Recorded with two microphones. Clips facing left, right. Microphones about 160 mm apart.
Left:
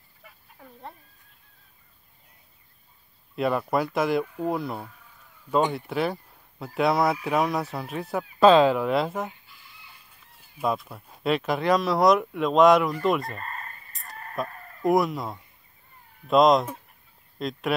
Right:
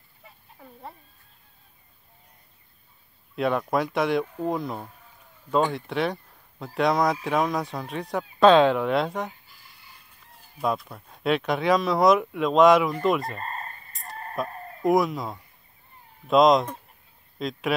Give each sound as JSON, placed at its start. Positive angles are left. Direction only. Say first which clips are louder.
{"t": 0.6, "sound": "speech", "louder": "right 1 dB", "side_deg": 0}
{"t": 3.3, "sound": "speech", "louder": "even", "side_deg": 0}
{"t": 10.6, "sound": "speech", "louder": "even", "side_deg": 0}
{"t": 13.4, "sound": "chicken", "louder": "right 3 dB", "side_deg": -30}
{"t": 14.0, "sound": "fowl", "louder": "right 4 dB", "side_deg": -30}
{"t": 14.5, "sound": "chicken", "louder": "right 6 dB", "side_deg": -30}
{"t": 14.9, "sound": "speech", "louder": "even", "side_deg": 0}